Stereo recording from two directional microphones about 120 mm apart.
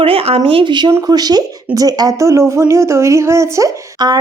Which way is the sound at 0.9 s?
30° right (ahead or behind).